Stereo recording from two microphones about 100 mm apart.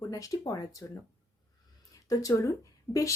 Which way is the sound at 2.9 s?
15° left (ahead or behind).